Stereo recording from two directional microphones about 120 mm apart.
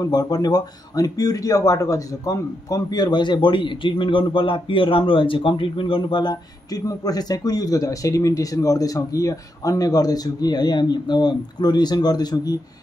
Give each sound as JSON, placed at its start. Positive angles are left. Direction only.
{"t": 0.0, "sound": "speech", "side_deg": 35}